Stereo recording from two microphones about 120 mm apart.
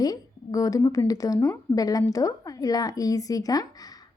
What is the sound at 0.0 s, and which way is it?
A woman's voice, 30° left (ahead or behind).